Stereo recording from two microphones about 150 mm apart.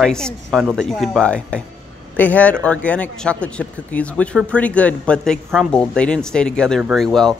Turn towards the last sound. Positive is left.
turn(degrees=5)  # may be behind; listen again after turning